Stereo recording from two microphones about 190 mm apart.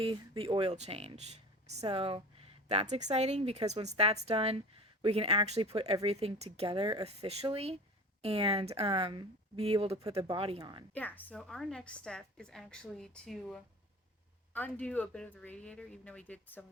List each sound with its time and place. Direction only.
0.0 s speech: 30° right (ahead or behind)
10.9 s a woman's voice: 10° left (ahead or behind)